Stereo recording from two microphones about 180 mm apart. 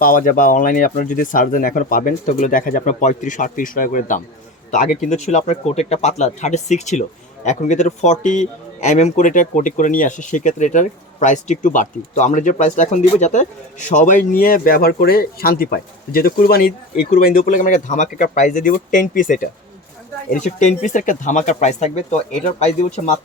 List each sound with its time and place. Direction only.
0.0 s a man's voice: 50° left (ahead or behind)